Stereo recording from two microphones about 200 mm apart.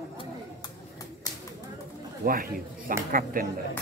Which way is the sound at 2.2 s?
45° right (ahead or behind).